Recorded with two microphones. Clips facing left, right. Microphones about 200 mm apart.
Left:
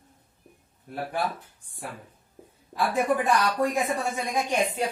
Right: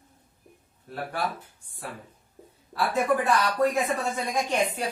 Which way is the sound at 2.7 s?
20° left (ahead or behind).